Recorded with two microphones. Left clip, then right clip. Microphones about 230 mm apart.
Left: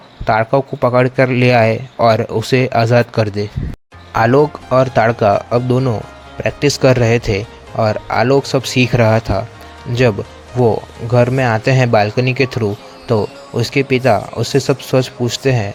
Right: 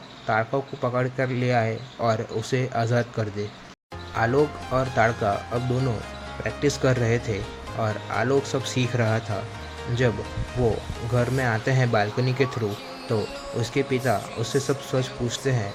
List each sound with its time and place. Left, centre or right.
0.3 s a man's voice: left